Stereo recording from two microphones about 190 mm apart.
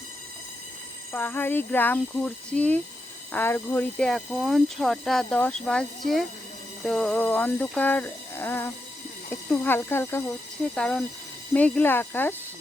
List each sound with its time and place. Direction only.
1.1 s speech: 10° left (ahead or behind)